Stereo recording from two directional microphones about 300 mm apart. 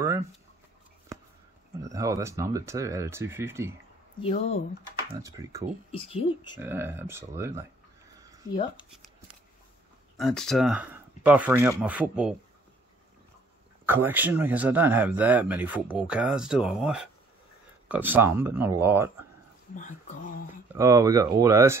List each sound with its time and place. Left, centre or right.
1.9 s speech: centre
4.2 s speech: left
5.2 s speech: centre
5.9 s speech: centre
6.6 s speech: centre
10.1 s speech: centre
13.8 s speech: centre
20.7 s speech: centre